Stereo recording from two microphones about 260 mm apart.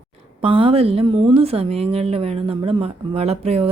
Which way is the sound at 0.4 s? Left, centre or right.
Right.